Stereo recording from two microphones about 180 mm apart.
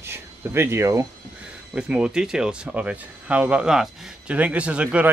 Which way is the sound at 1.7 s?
5° right (ahead or behind).